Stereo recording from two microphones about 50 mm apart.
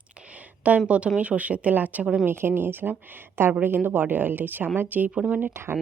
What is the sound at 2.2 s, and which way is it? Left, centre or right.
A woman's voice, right.